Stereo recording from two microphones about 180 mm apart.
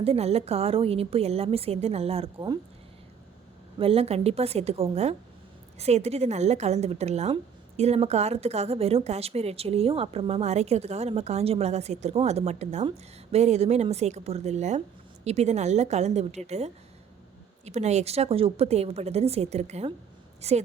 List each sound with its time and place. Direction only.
0.0 s speech: 35° right (ahead or behind)
3.8 s speech: 30° right (ahead or behind)